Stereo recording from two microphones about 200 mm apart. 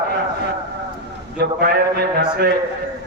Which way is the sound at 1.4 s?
50° right (ahead or behind).